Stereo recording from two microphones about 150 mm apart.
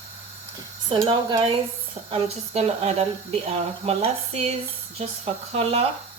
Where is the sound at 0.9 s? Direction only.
30° right (ahead or behind).